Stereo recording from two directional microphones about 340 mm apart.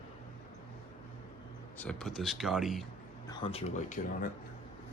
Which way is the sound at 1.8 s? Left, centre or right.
Centre.